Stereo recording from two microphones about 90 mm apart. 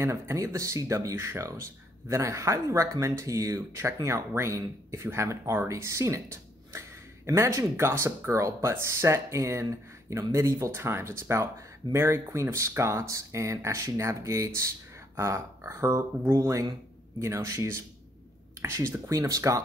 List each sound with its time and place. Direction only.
0.0 s speech: 35° right (ahead or behind)
7.2 s speech: 35° right (ahead or behind)